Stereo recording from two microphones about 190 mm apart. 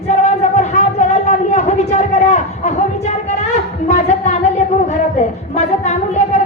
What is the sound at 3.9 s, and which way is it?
Music, 40° left (ahead or behind).